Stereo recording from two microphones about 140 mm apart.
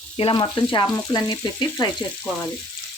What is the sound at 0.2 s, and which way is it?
Frying, 40° left (ahead or behind).